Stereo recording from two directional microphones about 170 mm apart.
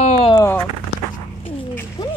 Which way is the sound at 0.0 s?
35° left (ahead or behind).